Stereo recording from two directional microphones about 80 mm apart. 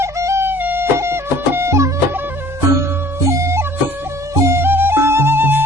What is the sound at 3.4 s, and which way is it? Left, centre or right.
Music, right.